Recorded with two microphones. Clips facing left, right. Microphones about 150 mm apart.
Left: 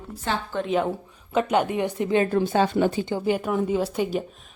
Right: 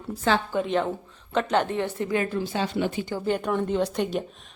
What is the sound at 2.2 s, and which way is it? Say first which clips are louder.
Speech: left 6 dB; 50° left (ahead or behind).